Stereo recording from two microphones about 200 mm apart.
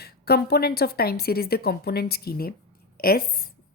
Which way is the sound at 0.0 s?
50° left (ahead or behind).